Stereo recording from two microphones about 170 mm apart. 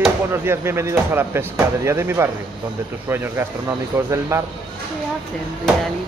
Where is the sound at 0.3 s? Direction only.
15° right (ahead or behind).